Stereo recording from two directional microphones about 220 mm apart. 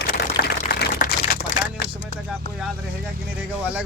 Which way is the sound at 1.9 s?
5° right (ahead or behind).